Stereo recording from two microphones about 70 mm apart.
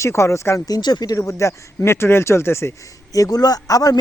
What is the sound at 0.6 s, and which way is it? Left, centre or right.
Speech, left.